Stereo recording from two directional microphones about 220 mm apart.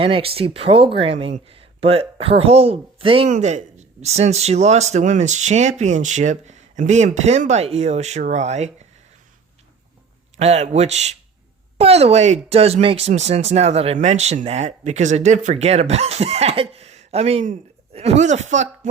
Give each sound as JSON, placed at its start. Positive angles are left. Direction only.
{"t": 0.0, "sound": "speech", "side_deg": -25}
{"t": 10.3, "sound": "speech", "side_deg": -30}